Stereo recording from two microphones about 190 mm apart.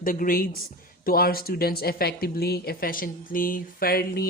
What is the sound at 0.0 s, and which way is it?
Speech, 45° left (ahead or behind).